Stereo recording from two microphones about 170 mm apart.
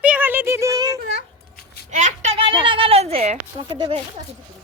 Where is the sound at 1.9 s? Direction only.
45° right (ahead or behind).